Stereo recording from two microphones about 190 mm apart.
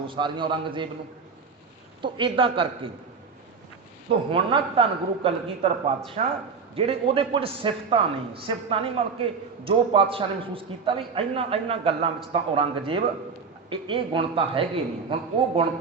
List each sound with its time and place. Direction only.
0.1 s a man's voice: 25° right (ahead or behind)
2.0 s a man's voice: 25° right (ahead or behind)
4.1 s a man's voice: 30° right (ahead or behind)